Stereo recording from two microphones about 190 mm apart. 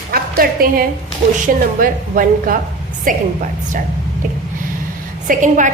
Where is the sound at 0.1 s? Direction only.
50° right (ahead or behind).